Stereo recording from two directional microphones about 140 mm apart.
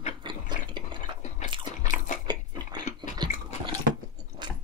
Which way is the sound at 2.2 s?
30° right (ahead or behind).